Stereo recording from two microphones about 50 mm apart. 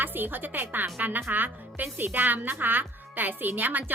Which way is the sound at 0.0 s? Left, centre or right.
Right.